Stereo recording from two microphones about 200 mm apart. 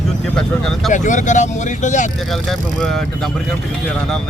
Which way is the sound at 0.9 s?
40° left (ahead or behind).